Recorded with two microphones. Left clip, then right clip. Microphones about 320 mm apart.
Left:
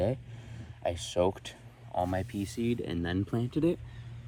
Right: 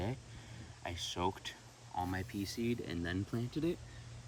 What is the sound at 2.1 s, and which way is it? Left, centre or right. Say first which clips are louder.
Speech: left 7 dB; centre.